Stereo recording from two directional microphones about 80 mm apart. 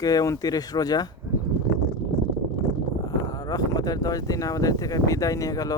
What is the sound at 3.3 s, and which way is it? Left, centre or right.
Speech, left.